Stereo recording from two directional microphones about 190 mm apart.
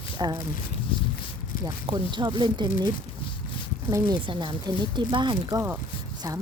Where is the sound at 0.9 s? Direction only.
25° left (ahead or behind).